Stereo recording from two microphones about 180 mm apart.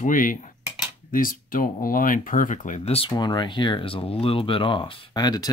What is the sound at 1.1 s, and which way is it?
Speech, 50° left (ahead or behind).